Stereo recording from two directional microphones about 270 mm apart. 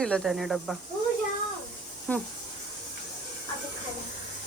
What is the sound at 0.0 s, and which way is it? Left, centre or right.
Speech, centre.